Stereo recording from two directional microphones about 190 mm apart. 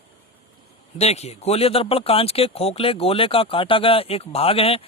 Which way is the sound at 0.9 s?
35° left (ahead or behind).